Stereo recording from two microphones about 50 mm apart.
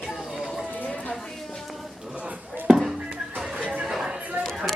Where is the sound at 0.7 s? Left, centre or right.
Left.